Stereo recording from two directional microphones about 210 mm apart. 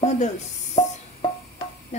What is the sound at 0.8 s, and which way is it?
Music, 25° left (ahead or behind).